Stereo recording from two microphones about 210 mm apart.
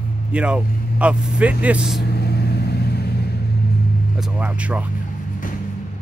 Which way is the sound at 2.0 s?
50° left (ahead or behind).